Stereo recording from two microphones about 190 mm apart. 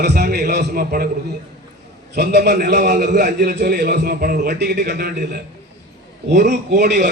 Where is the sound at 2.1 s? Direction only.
60° right (ahead or behind).